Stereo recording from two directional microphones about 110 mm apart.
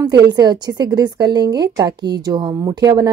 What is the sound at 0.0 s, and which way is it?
A woman's voice, 35° right (ahead or behind).